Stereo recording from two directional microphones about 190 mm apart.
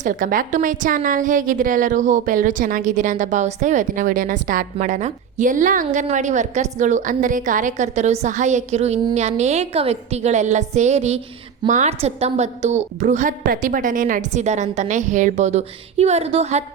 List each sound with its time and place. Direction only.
0.0 s a woman's voice: 45° right (ahead or behind)